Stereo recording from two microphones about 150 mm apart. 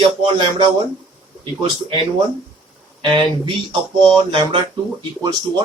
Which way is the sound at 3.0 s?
30° right (ahead or behind).